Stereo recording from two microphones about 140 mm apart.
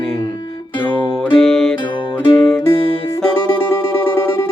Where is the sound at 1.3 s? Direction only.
5° left (ahead or behind).